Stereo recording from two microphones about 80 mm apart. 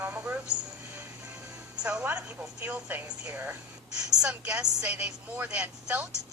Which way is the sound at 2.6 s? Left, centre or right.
Right.